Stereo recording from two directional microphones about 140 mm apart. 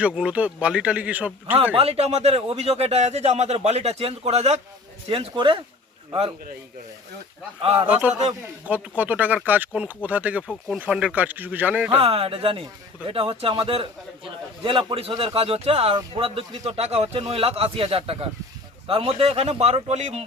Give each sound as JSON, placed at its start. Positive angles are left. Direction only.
{"t": 0.0, "sound": "speech", "side_deg": -5}
{"t": 1.7, "sound": "a man's voice", "side_deg": -45}
{"t": 7.6, "sound": "a man's voice", "side_deg": -40}
{"t": 7.9, "sound": "speech", "side_deg": -10}
{"t": 11.9, "sound": "a man's voice", "side_deg": -45}